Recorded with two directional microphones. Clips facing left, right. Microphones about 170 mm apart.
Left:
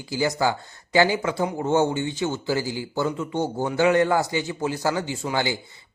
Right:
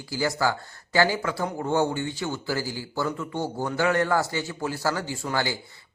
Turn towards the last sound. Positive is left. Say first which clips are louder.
# left 2 dB
turn(degrees=20)  # may be behind; listen again after turning